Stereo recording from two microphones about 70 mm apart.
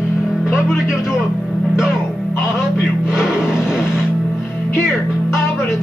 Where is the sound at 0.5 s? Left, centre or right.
Centre.